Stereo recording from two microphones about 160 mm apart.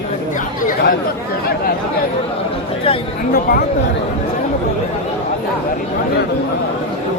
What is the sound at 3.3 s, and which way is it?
Speech, 70° left (ahead or behind).